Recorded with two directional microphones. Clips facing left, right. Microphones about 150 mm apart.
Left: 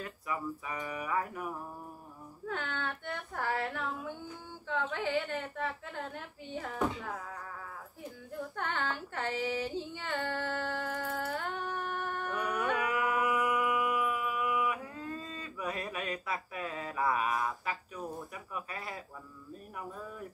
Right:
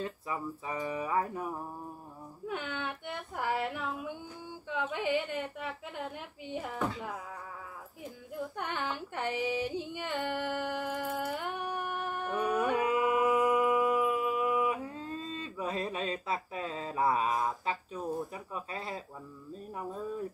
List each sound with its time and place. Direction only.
0.0 s speech: 25° right (ahead or behind)
2.4 s a woman's voice: 15° right (ahead or behind)
8.5 s female singing: 15° right (ahead or behind)
12.4 s a sound: 25° right (ahead or behind)
19.5 s speech: 25° right (ahead or behind)